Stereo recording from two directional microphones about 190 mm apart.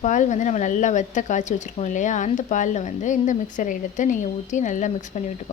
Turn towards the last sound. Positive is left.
turn(degrees=40)  # may be behind; listen again after turning